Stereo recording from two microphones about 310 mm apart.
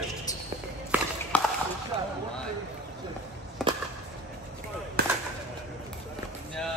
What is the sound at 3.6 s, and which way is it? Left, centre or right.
Chop, centre.